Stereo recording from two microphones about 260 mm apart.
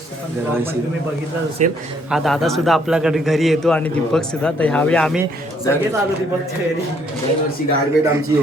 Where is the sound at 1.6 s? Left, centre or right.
Right.